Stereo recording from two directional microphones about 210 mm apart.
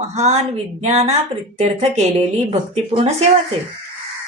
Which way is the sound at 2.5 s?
30° right (ahead or behind).